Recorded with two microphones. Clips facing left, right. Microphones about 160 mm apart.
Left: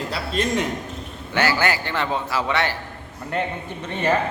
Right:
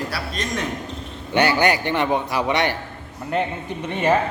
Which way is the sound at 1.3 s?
20° right (ahead or behind).